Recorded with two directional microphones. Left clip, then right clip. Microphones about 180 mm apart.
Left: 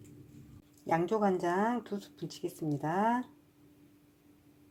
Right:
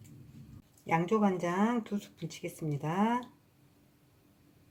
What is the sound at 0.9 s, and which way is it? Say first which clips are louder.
Speech: even; 15° left (ahead or behind).